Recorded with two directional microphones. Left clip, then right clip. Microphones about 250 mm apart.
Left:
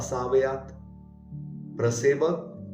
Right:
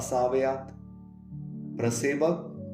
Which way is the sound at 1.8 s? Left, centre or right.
Right.